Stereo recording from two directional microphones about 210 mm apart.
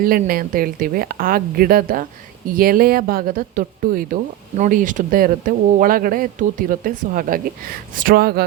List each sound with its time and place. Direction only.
0.0 s a woman's voice: 45° right (ahead or behind)